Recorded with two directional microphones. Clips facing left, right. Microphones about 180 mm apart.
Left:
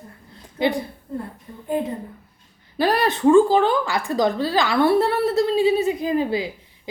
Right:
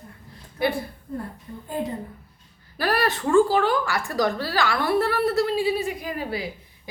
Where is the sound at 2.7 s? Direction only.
20° left (ahead or behind).